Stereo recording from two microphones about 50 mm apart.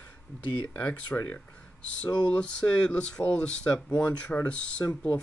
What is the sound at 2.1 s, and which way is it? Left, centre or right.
Speech, left.